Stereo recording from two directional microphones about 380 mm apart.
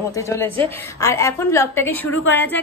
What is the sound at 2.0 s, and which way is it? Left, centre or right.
Speech, left.